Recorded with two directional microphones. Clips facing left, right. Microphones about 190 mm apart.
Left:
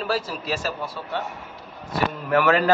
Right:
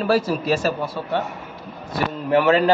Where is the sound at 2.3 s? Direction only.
25° right (ahead or behind).